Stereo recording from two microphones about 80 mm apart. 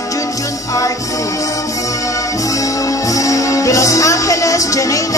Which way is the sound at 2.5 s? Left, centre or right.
Left.